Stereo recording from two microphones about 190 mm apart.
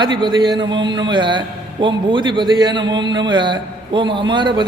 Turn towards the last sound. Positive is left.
turn(degrees=-25)  # may be behind; listen again after turning